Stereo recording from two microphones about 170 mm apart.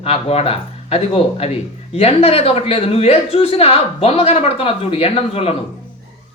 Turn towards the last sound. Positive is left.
turn(degrees=35)  # may be behind; listen again after turning